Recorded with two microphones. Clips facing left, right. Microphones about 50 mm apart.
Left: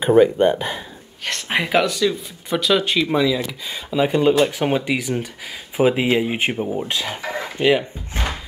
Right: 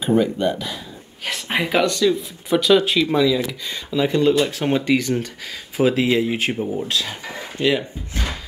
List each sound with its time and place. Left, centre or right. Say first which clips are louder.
0.0 s speech: left 5 dB; left
1.2 s speech: left 1 dB; centre; by 8.2 s left